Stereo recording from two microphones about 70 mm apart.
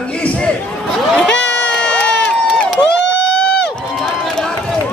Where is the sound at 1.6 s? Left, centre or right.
Centre.